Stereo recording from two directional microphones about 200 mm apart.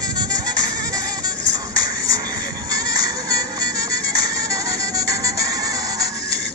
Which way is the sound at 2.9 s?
20° right (ahead or behind).